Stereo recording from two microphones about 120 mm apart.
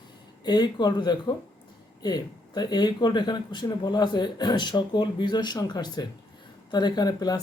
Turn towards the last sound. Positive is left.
turn(degrees=35)  # may be behind; listen again after turning